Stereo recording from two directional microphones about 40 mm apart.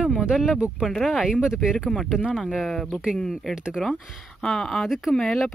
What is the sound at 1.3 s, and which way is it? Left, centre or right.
Speech, centre.